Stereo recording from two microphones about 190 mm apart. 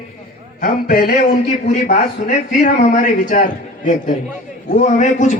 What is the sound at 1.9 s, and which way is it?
Speech, 40° left (ahead or behind).